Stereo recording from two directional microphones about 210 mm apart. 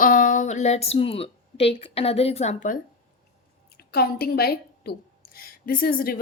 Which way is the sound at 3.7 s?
50° left (ahead or behind).